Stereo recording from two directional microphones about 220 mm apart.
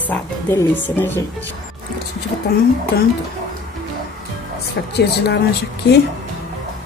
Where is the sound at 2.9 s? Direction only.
45° left (ahead or behind).